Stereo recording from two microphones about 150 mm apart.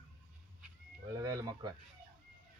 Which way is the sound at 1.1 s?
20° right (ahead or behind).